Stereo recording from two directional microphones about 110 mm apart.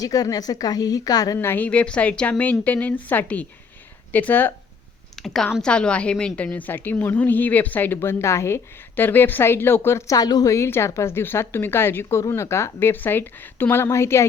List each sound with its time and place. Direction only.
0.0 s a woman's voice: 35° left (ahead or behind)
1.4 s a woman's voice: 20° left (ahead or behind)
5.1 s a woman's voice: 5° left (ahead or behind); by 10.2 s 25° left (ahead or behind)
10.2 s speech: 35° left (ahead or behind)